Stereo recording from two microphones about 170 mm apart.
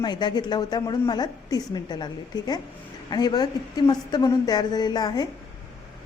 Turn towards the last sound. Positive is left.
turn(degrees=25)  # may be behind; listen again after turning